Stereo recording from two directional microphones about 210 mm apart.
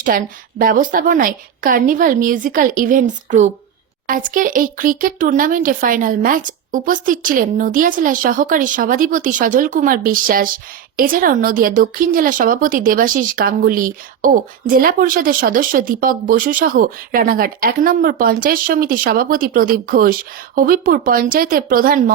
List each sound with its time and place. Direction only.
0.0 s speech: 40° right (ahead or behind)